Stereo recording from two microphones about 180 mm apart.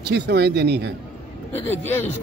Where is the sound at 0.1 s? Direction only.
65° right (ahead or behind).